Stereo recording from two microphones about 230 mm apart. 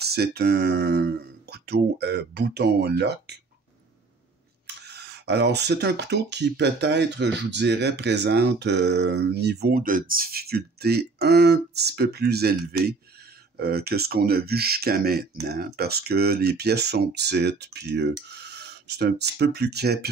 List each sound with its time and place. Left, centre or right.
0.0 s speech: right
4.8 s speech: right